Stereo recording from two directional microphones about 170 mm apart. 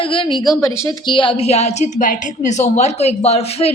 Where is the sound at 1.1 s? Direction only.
30° left (ahead or behind).